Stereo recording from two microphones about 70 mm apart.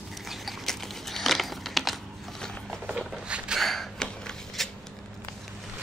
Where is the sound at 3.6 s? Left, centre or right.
Centre.